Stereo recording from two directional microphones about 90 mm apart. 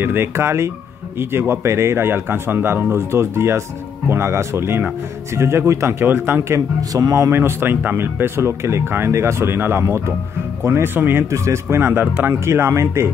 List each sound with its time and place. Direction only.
0.0 s speech: 25° right (ahead or behind)
6.9 s speech: 40° right (ahead or behind); by 11.2 s 20° right (ahead or behind)
11.3 s speech: 35° right (ahead or behind)